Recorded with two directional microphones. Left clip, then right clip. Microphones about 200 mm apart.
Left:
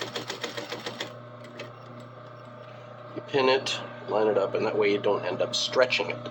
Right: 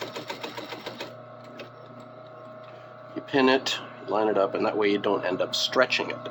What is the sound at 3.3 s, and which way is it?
A man's voice, 45° right (ahead or behind).